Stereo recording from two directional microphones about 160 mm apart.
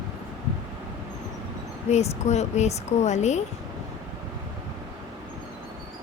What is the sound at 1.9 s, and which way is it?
Speech, 45° left (ahead or behind).